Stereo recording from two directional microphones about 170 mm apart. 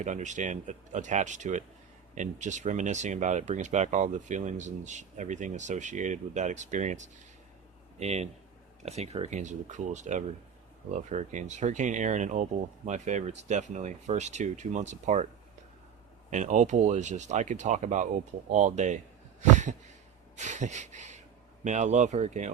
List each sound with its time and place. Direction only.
0.0 s speech: 45° right (ahead or behind)
16.3 s speech: 45° right (ahead or behind)
19.4 s a sound: 45° right (ahead or behind)
20.3 s speech: 45° right (ahead or behind)